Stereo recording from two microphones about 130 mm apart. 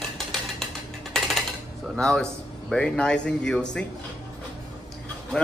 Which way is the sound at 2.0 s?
5° left (ahead or behind).